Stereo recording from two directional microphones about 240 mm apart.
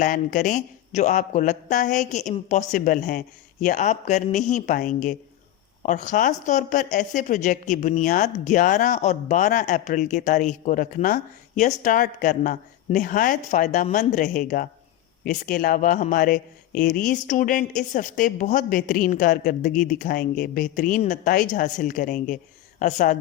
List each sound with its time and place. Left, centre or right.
0.0 s a woman's voice: left